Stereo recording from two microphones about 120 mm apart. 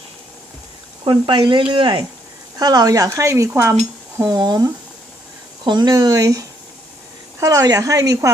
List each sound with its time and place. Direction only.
1.0 s speech: 40° right (ahead or behind)